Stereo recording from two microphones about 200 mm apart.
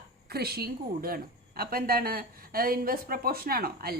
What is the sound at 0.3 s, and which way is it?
A woman's voice, 50° right (ahead or behind).